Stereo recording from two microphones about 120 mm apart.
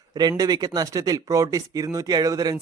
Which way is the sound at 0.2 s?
35° right (ahead or behind).